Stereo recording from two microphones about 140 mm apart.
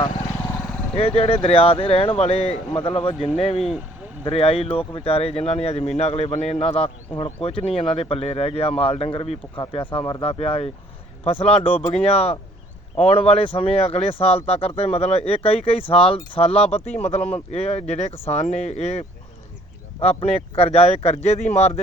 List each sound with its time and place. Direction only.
0.9 s speech: 45° left (ahead or behind)